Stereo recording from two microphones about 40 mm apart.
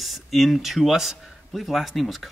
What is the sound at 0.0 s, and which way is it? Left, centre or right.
A man's voice, centre.